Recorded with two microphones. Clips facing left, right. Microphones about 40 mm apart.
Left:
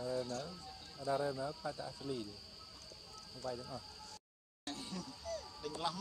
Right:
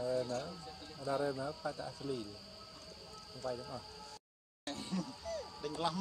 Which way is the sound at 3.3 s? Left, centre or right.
Centre.